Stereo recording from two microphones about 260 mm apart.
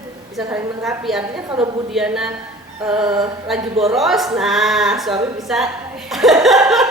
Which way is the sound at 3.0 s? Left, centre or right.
Centre.